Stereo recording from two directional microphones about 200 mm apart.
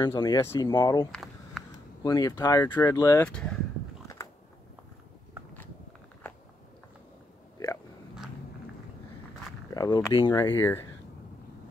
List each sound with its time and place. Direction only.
0.0 s speech: 20° left (ahead or behind)
1.1 s a sound: centre (ahead or behind)
2.0 s speech: 20° left (ahead or behind)
3.3 s speech: 5° left (ahead or behind)
4.2 s biting: 15° left (ahead or behind)
7.5 s oink: 15° left (ahead or behind)
9.8 s a sound: 20° left (ahead or behind)
10.1 s speech: 20° left (ahead or behind)